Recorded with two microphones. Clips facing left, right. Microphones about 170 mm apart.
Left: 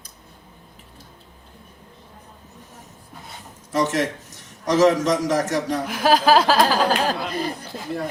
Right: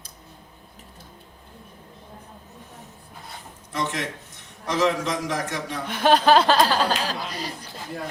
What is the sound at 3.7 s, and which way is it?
A woman's voice, 40° left (ahead or behind).